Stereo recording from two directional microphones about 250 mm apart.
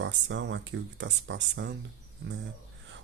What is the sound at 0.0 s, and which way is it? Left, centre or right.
Speech, right.